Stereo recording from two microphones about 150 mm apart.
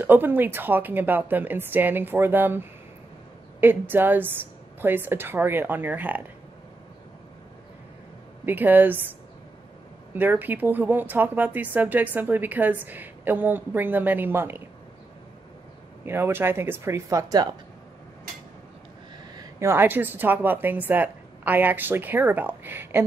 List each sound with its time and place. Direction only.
0.0 s speech: 15° right (ahead or behind)
3.6 s speech: 15° right (ahead or behind)
8.5 s speech: 10° right (ahead or behind)
10.1 s speech: 10° right (ahead or behind)
16.1 s speech: 15° right (ahead or behind)
19.3 s speech: 20° right (ahead or behind)